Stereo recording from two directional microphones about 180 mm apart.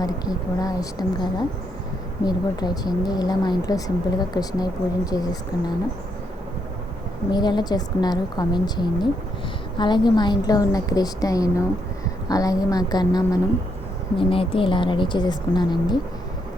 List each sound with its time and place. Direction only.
0.6 s speech: 20° left (ahead or behind)
7.3 s speech: 25° left (ahead or behind)